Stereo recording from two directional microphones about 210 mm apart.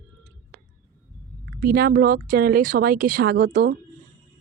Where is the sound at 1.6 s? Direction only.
45° right (ahead or behind).